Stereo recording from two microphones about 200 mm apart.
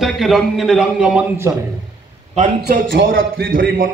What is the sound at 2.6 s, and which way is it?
Speech, 55° right (ahead or behind).